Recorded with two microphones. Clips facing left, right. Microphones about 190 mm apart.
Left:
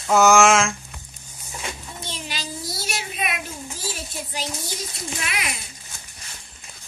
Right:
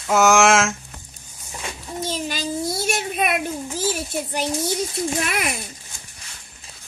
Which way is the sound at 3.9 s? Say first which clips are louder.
Right 7 dB; 55° right (ahead or behind).